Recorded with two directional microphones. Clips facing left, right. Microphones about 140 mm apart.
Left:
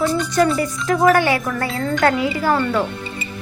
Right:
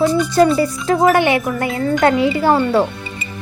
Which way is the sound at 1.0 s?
20° right (ahead or behind).